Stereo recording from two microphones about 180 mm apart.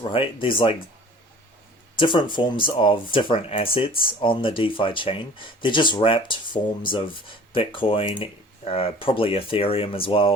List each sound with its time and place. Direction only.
0.0 s speech: 30° left (ahead or behind)
2.0 s speech: 25° left (ahead or behind)